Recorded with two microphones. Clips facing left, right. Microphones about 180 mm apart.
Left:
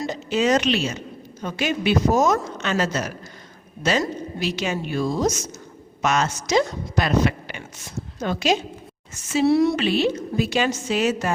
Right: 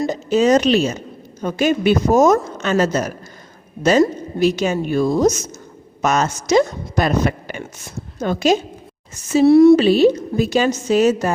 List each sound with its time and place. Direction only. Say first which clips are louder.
0.0 s a woman's voice: right 6 dB; 45° right (ahead or behind)
9.7 s a woman's voice: right 9 dB; 40° right (ahead or behind)